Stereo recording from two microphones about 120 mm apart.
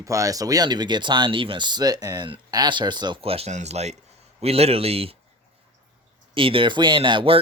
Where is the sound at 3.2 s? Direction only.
55° right (ahead or behind).